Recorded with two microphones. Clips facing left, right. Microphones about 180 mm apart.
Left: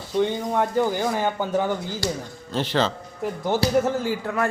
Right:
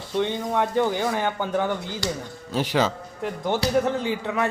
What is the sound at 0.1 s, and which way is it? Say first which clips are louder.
Speech: left 2 dB; 5° left (ahead or behind).